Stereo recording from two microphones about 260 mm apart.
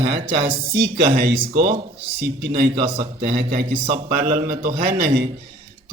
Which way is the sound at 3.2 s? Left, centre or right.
Right.